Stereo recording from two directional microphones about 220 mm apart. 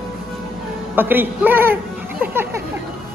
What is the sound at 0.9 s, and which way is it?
Speech, 10° right (ahead or behind).